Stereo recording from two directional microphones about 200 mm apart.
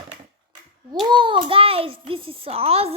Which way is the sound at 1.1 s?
25° right (ahead or behind).